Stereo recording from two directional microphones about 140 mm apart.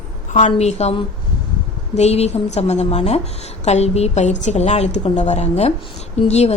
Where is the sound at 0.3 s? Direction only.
55° left (ahead or behind).